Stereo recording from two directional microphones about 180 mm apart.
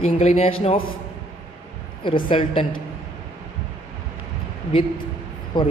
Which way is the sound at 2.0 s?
30° left (ahead or behind).